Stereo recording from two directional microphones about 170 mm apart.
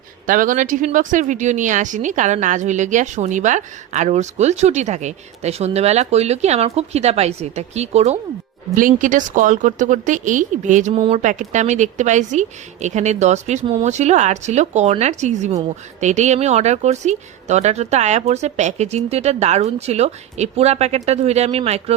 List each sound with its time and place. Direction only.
0.3 s speech: 50° right (ahead or behind)
8.7 s a woman's voice: 50° right (ahead or behind)